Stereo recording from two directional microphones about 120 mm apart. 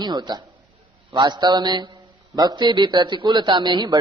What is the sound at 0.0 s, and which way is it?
A man's voice, 35° right (ahead or behind).